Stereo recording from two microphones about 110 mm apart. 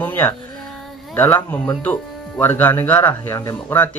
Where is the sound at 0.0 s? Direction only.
20° left (ahead or behind).